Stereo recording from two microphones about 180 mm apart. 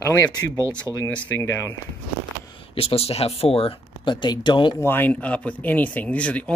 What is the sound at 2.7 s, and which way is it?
Speech, 35° left (ahead or behind).